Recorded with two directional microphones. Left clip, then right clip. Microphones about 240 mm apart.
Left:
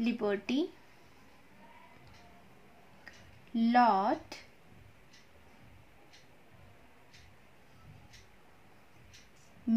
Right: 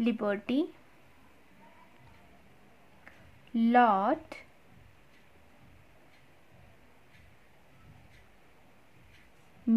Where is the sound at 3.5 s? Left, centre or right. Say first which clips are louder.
Right 2 dB; right.